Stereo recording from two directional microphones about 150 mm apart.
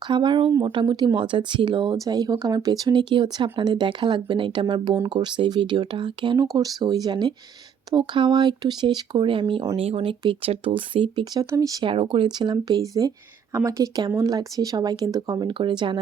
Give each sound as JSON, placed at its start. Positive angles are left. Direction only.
{"t": 0.1, "sound": "speech", "side_deg": -30}
{"t": 11.9, "sound": "speech", "side_deg": -35}